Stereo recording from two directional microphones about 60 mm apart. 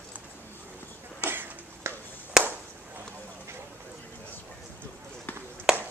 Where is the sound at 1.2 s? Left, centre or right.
Right.